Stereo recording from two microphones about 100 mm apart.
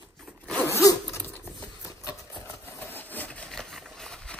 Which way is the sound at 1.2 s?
20° left (ahead or behind).